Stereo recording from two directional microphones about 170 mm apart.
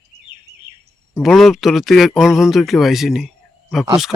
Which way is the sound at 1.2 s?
Centre (ahead or behind).